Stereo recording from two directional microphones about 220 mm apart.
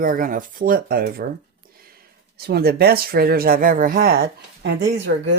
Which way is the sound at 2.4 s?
45° right (ahead or behind).